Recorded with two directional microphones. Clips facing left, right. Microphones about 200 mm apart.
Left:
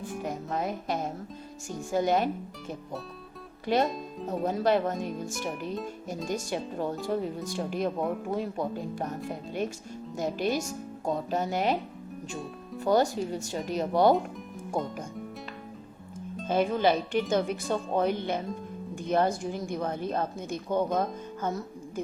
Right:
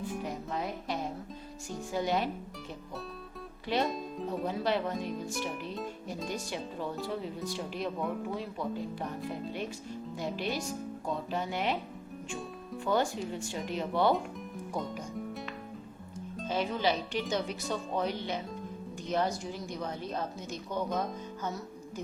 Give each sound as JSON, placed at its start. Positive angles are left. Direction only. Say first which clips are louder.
{"t": 0.3, "sound": "speech", "louder": "left 4 dB", "side_deg": 45}
{"t": 3.8, "sound": "speech", "louder": "left 1 dB", "side_deg": 0}
{"t": 4.3, "sound": "speech", "louder": "left 6 dB", "side_deg": 45}
{"t": 6.2, "sound": "speech", "louder": "left 6 dB", "side_deg": 45}
{"t": 12.8, "sound": "speech", "louder": "left 5 dB", "side_deg": 40}
{"t": 16.5, "sound": "speech", "louder": "left 6 dB", "side_deg": 50}